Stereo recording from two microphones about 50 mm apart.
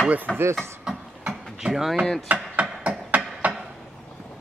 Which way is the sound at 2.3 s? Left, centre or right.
Right.